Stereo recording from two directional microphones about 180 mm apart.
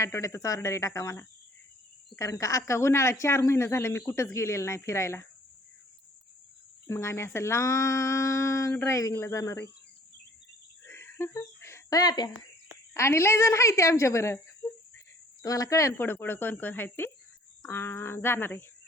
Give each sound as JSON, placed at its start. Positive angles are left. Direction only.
{"t": 0.0, "sound": "speech", "side_deg": 15}
{"t": 6.8, "sound": "speech", "side_deg": 15}
{"t": 10.8, "sound": "a sound", "side_deg": 15}
{"t": 12.9, "sound": "a woman's voice", "side_deg": 15}